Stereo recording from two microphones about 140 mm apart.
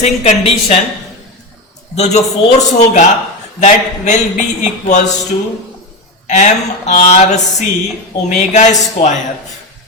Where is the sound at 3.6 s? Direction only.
60° left (ahead or behind).